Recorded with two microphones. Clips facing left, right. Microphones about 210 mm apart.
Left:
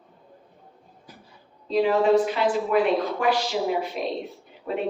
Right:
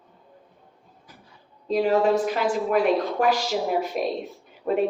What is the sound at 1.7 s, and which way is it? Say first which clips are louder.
A woman's voice: left 1 dB; 45° right (ahead or behind).